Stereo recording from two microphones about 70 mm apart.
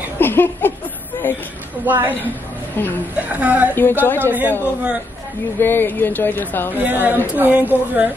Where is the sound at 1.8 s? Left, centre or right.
Right.